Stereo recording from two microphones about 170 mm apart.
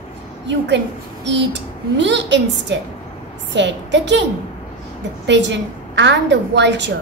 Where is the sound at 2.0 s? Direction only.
90° right.